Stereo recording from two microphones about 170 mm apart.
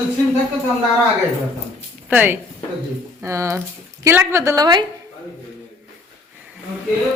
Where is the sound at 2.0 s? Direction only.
10° right (ahead or behind).